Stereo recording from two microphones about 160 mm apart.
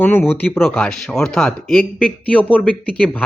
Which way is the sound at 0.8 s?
Centre (ahead or behind).